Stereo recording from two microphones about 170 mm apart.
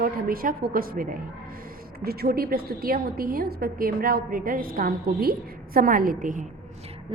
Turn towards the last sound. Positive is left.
turn(degrees=-50)  # may be behind; listen again after turning